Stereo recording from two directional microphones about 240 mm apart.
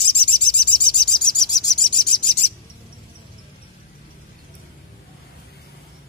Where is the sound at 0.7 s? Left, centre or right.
Centre.